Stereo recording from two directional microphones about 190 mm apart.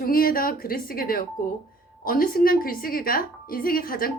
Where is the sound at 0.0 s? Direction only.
50° left (ahead or behind).